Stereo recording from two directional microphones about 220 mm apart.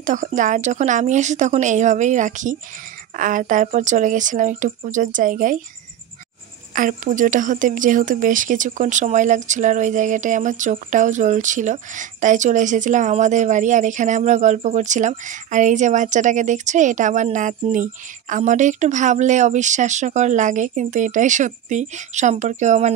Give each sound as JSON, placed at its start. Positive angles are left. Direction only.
{"t": 0.0, "sound": "a woman's voice", "side_deg": -35}
{"t": 6.7, "sound": "a woman's voice", "side_deg": -35}